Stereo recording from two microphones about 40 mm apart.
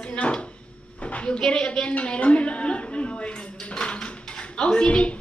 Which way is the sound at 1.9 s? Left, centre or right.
Left.